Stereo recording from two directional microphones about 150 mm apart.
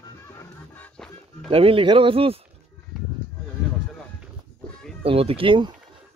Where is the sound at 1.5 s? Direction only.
40° right (ahead or behind).